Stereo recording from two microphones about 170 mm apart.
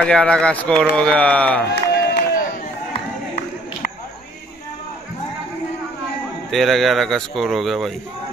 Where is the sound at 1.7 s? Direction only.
65° left (ahead or behind).